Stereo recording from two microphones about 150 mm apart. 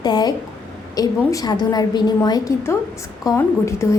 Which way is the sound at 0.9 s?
25° left (ahead or behind).